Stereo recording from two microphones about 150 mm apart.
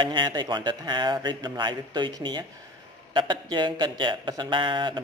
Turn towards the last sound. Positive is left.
turn(degrees=-30)  # may be behind; listen again after turning